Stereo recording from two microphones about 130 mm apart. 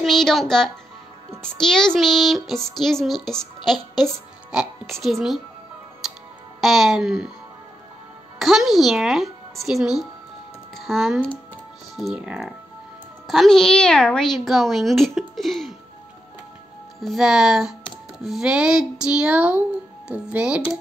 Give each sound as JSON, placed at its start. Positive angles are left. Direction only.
{"t": 0.0, "sound": "speech", "side_deg": 0}
{"t": 6.6, "sound": "speech", "side_deg": 0}
{"t": 8.4, "sound": "speech", "side_deg": 0}
{"t": 17.0, "sound": "speech", "side_deg": 0}